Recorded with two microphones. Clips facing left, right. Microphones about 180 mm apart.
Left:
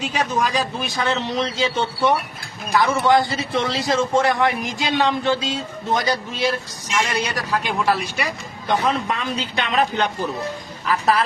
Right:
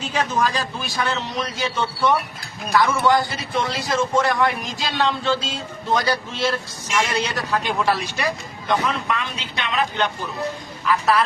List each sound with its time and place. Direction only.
0.0 s a man's voice: 15° left (ahead or behind)
8.6 s a man's voice: 35° left (ahead or behind)